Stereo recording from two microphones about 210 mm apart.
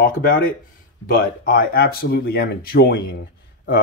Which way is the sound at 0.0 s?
45° left (ahead or behind).